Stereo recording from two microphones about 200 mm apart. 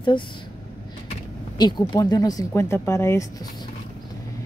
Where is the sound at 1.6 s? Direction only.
20° left (ahead or behind).